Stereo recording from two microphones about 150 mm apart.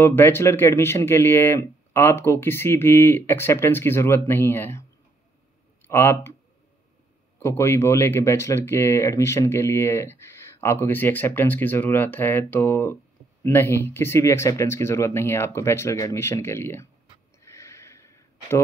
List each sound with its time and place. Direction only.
0.0 s speech: 15° left (ahead or behind)
5.9 s speech: 15° left (ahead or behind)
7.3 s speech: 20° left (ahead or behind)
17.4 s a sound: 20° left (ahead or behind)